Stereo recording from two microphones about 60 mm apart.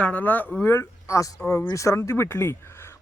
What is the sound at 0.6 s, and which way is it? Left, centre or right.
Speech, left.